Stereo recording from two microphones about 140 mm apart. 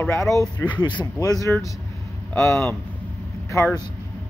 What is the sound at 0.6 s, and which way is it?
Speech, 30° left (ahead or behind).